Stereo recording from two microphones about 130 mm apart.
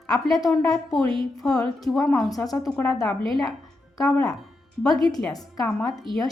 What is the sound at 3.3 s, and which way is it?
Speech, centre (ahead or behind).